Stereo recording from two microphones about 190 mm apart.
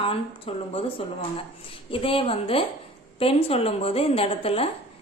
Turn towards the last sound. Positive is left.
turn(degrees=30)  # may be behind; listen again after turning